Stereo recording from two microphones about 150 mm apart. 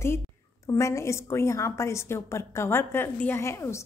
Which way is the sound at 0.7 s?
20° left (ahead or behind).